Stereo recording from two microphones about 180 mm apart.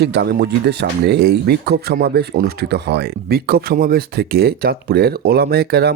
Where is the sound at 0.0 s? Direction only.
65° right (ahead or behind).